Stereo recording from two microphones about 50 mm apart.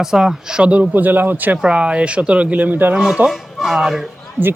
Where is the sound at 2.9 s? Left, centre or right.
Centre.